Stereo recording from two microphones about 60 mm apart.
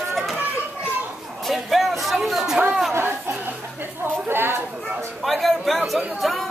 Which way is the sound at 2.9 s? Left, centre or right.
Right.